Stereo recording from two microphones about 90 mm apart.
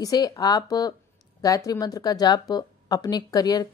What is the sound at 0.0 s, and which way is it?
Speech, 45° left (ahead or behind).